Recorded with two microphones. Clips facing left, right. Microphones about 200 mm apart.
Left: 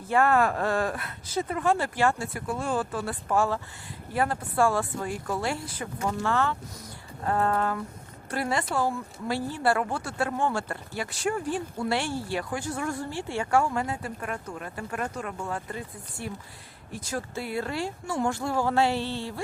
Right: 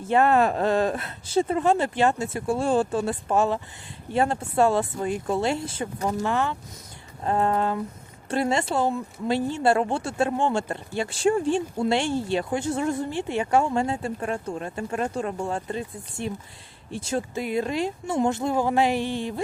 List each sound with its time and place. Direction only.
0.1 s speech: 20° right (ahead or behind)